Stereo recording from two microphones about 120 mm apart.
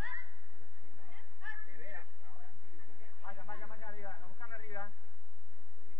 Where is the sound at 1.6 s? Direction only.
35° right (ahead or behind).